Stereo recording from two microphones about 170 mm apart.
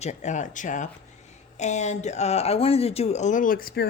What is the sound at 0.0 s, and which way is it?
Speech, 45° left (ahead or behind).